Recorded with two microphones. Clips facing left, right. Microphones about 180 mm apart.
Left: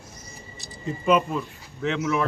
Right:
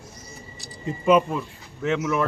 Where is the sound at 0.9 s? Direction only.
10° right (ahead or behind).